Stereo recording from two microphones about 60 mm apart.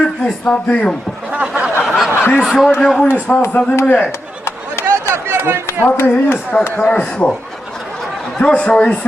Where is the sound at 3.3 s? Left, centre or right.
Left.